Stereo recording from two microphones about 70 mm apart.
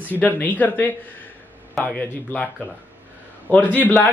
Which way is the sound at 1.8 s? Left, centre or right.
Centre.